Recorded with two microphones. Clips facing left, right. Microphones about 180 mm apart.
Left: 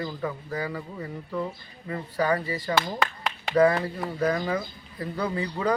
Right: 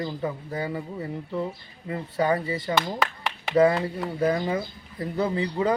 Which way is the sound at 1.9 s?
25° right (ahead or behind).